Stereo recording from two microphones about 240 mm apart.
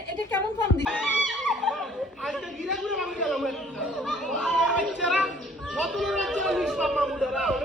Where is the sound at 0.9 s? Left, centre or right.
Centre.